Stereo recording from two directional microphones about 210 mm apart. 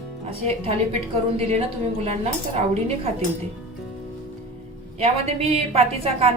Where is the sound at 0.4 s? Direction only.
30° right (ahead or behind).